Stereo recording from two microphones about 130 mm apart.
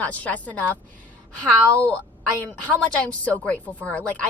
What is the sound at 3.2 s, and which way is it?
Speech, 10° left (ahead or behind).